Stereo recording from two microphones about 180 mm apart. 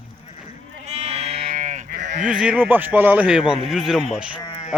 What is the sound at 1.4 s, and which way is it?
Sheep, 45° right (ahead or behind).